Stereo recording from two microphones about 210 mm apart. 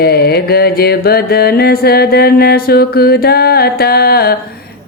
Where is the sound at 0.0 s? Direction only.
50° left (ahead or behind).